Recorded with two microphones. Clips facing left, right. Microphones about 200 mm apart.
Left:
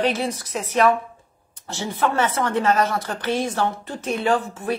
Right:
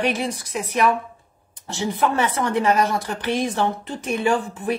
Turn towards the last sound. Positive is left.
turn(degrees=-15)  # may be behind; listen again after turning